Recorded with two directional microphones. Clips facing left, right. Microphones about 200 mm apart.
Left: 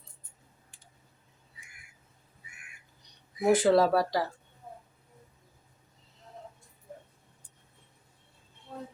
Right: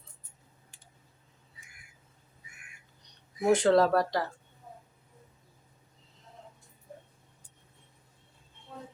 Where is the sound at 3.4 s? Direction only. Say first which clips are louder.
Even; 5° left (ahead or behind).